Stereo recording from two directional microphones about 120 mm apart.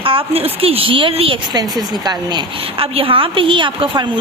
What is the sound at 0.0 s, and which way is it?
A woman's voice, 50° right (ahead or behind).